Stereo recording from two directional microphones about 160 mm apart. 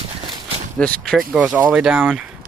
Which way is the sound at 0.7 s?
5° left (ahead or behind).